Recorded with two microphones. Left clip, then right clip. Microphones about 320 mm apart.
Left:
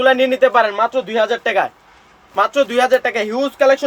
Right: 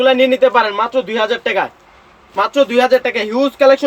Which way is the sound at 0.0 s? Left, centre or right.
Left.